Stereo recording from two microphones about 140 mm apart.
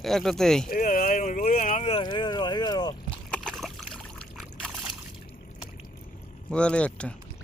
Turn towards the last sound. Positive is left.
turn(degrees=10)  # may be behind; listen again after turning